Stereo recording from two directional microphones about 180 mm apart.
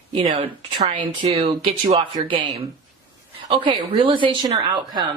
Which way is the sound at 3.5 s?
30° right (ahead or behind).